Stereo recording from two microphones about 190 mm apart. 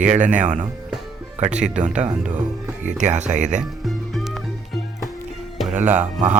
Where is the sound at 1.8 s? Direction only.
40° right (ahead or behind).